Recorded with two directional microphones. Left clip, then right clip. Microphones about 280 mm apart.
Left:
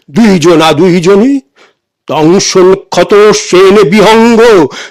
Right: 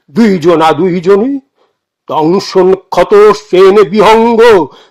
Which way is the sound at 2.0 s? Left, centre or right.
Left.